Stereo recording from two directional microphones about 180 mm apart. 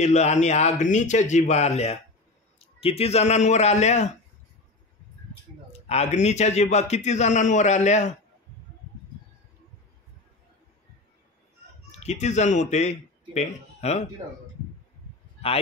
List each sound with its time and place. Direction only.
0.0 s a man's voice: 40° left (ahead or behind)
5.7 s a man's voice: 35° left (ahead or behind)
11.9 s speech: 40° left (ahead or behind)